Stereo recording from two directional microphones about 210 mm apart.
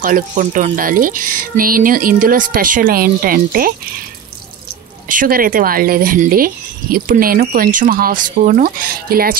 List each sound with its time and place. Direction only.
0.0 s speech: 40° right (ahead or behind)
5.0 s speech: 40° right (ahead or behind)